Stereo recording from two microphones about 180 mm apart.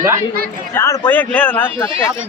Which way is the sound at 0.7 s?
15° left (ahead or behind).